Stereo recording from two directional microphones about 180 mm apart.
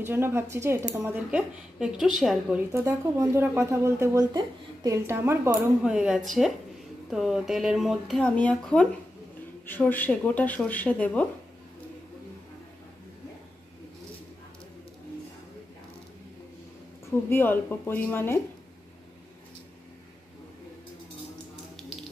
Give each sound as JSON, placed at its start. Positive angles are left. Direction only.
{"t": 0.0, "sound": "speech", "side_deg": -10}
{"t": 2.7, "sound": "speech", "side_deg": -15}
{"t": 5.9, "sound": "speech", "side_deg": -5}
{"t": 17.3, "sound": "speech", "side_deg": 10}